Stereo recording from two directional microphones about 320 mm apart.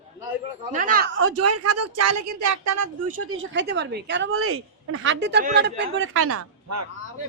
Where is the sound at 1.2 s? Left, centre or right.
Right.